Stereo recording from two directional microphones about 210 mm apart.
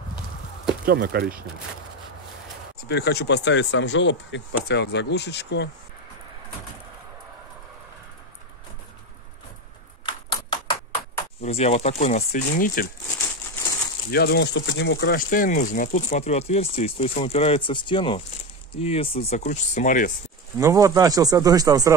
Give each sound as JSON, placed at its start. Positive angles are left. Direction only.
{"t": 0.8, "sound": "speech", "side_deg": -50}
{"t": 2.9, "sound": "speech", "side_deg": 50}
{"t": 10.0, "sound": "typewriter", "side_deg": 20}
{"t": 11.4, "sound": "speech", "side_deg": 30}
{"t": 14.1, "sound": "speech", "side_deg": 50}
{"t": 20.5, "sound": "speech", "side_deg": -15}